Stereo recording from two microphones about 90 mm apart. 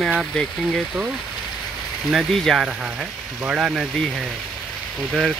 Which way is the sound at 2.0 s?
Centre (ahead or behind).